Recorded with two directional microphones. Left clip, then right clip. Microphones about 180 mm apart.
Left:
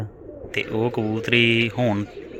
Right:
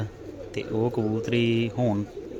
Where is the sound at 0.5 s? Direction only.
10° right (ahead or behind).